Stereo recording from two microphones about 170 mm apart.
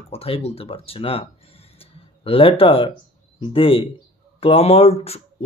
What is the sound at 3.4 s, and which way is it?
Speech, 30° left (ahead or behind).